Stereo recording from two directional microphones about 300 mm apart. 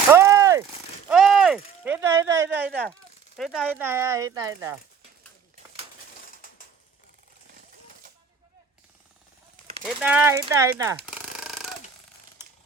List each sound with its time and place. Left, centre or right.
0.1 s a sound: centre
2.4 s speech: centre
6.3 s mechanisms: left
9.8 s speech: centre